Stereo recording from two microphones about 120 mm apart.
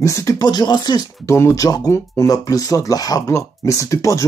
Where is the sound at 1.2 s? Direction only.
25° left (ahead or behind).